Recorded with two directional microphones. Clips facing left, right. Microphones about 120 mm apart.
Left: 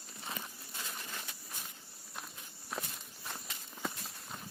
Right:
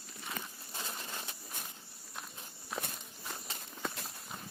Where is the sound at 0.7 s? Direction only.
30° right (ahead or behind).